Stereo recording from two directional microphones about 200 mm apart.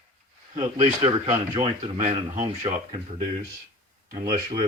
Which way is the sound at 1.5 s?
35° right (ahead or behind).